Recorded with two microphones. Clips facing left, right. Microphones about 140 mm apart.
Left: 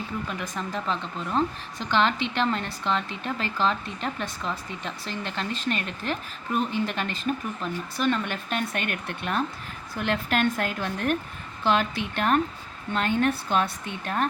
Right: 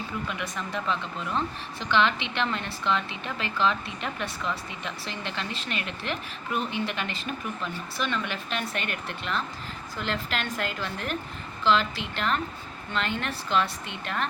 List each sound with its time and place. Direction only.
0.3 s speech: 35° left (ahead or behind)